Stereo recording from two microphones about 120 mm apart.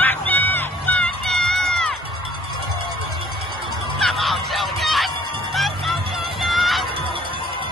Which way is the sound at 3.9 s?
Centre (ahead or behind).